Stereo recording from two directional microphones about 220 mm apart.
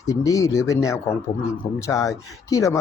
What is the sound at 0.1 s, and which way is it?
Speech, 15° left (ahead or behind).